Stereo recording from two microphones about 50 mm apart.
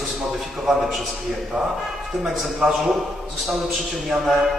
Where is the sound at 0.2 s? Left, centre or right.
Centre.